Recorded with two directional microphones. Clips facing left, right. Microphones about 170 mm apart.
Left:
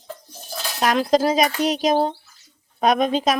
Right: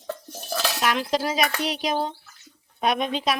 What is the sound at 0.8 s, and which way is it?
A woman's voice, 40° left (ahead or behind).